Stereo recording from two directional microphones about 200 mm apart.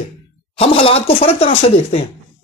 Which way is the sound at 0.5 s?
25° left (ahead or behind).